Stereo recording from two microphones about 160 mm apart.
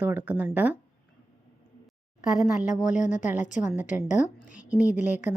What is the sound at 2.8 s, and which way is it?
Speech, 50° left (ahead or behind).